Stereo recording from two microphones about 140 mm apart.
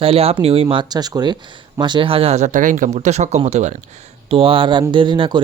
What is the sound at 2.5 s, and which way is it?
Speech, 65° right (ahead or behind).